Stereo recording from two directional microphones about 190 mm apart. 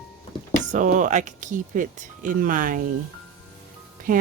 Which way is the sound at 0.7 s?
40° right (ahead or behind).